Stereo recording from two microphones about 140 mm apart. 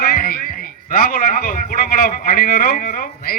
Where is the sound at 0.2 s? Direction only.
90° left.